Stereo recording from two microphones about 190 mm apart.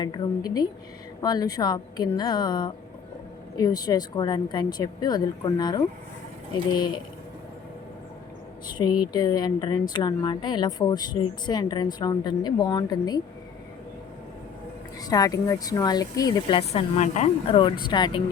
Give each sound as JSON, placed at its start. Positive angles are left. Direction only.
{"t": 0.0, "sound": "speech", "side_deg": 20}
{"t": 8.8, "sound": "speech", "side_deg": 20}
{"t": 15.0, "sound": "speech", "side_deg": 20}